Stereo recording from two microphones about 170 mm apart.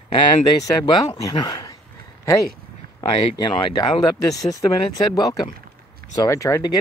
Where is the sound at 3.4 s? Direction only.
25° left (ahead or behind).